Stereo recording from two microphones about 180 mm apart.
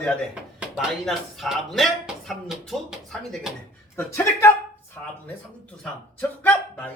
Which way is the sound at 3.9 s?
15° left (ahead or behind).